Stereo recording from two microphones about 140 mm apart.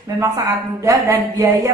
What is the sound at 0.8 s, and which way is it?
Speech, 25° right (ahead or behind).